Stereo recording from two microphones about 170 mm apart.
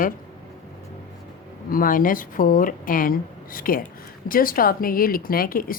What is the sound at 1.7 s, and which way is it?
Speech, 55° left (ahead or behind).